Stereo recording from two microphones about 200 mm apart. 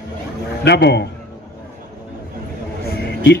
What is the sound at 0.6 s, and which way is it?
Speech, 55° left (ahead or behind).